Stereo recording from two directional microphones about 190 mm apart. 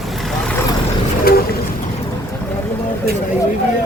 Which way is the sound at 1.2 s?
50° left (ahead or behind).